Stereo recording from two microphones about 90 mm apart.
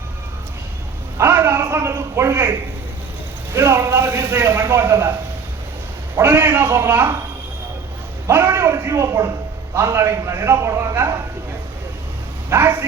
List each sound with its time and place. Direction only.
1.2 s a man's voice: 25° right (ahead or behind)
3.5 s a man's voice: 25° right (ahead or behind)
6.1 s a man's voice: 25° right (ahead or behind)
8.3 s a man's voice: 25° right (ahead or behind)
12.5 s speech: 25° right (ahead or behind)